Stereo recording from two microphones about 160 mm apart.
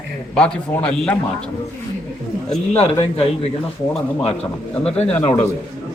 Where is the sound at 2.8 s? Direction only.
35° left (ahead or behind).